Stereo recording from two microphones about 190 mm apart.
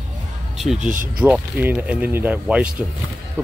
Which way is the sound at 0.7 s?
45° right (ahead or behind).